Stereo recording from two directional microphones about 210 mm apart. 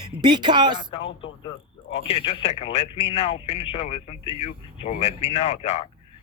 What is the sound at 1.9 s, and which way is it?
Speech, 30° left (ahead or behind).